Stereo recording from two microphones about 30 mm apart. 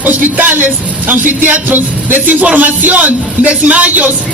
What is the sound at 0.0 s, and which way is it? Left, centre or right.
Speech, right.